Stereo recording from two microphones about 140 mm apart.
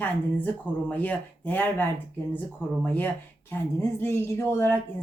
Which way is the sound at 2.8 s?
15° left (ahead or behind).